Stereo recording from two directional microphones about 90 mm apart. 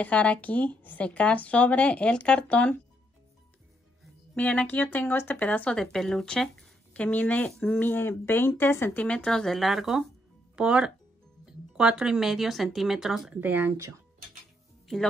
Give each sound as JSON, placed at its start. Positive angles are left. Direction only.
{"t": 0.0, "sound": "speech", "side_deg": 15}
{"t": 4.4, "sound": "speech", "side_deg": 15}
{"t": 13.3, "sound": "speech", "side_deg": -20}